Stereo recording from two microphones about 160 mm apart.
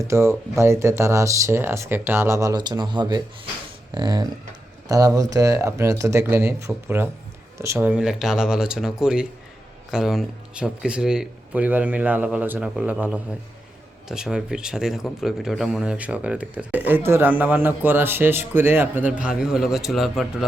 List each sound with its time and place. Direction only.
0.0 s speech: 15° right (ahead or behind); by 20.4 s centre (ahead or behind)